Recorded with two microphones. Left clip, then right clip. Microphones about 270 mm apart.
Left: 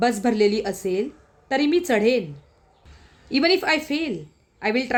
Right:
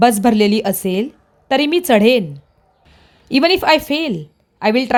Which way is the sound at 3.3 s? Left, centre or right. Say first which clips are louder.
Right 7 dB; right.